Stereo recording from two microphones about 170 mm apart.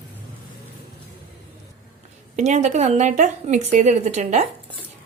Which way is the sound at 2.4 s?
45° right (ahead or behind).